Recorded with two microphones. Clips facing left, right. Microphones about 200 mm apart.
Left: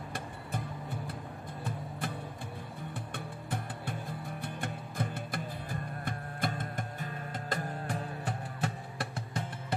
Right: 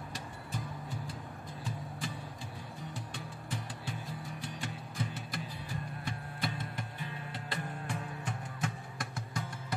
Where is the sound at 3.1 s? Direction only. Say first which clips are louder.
Left 3 dB; 55° left (ahead or behind).